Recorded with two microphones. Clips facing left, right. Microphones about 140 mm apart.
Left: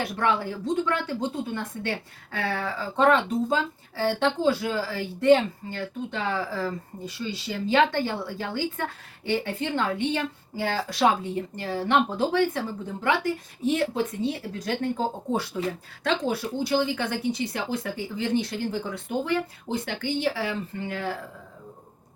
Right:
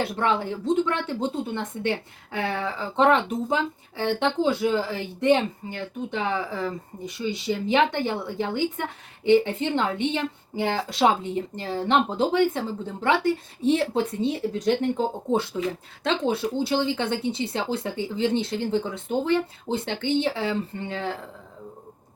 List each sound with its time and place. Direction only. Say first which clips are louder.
0.0 s a woman's voice: right 1 dB; 25° right (ahead or behind)
16.0 s a woman's voice: right 2 dB; 25° right (ahead or behind)